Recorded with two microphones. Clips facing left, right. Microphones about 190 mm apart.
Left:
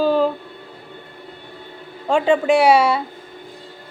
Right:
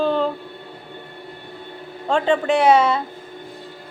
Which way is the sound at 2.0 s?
10° left (ahead or behind).